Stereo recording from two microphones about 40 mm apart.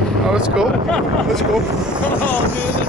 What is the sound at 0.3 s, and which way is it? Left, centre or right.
Speech, right.